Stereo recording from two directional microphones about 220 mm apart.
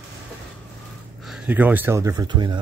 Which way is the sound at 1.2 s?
5° right (ahead or behind).